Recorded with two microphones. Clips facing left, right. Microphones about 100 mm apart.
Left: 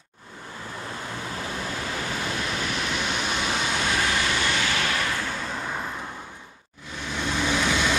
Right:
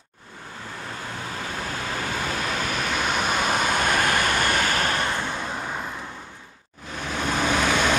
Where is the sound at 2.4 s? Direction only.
45° right (ahead or behind).